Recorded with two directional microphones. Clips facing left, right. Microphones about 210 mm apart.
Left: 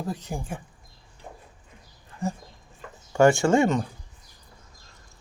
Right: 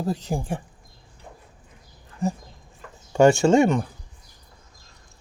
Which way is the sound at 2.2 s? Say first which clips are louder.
Right 4 dB; 20° right (ahead or behind).